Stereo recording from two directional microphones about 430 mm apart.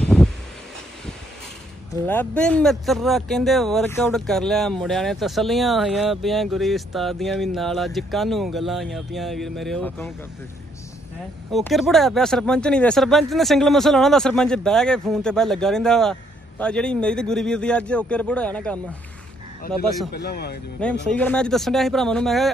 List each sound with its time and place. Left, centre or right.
0.0 s a sound: centre
2.0 s speech: centre
11.5 s speech: centre
20.1 s speech: left
21.1 s speech: centre